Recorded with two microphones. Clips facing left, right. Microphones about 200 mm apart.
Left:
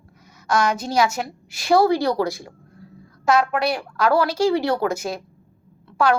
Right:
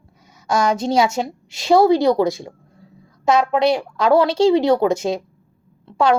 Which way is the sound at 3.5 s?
20° right (ahead or behind).